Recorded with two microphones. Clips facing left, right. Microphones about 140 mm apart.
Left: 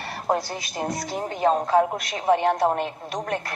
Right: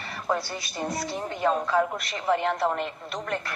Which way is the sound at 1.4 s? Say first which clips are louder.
Left 4 dB; 45° left (ahead or behind).